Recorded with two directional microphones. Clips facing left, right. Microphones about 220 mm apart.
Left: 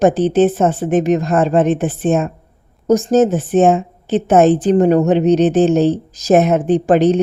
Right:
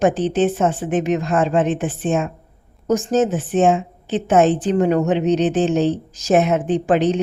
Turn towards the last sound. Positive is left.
turn(degrees=40)  # may be behind; listen again after turning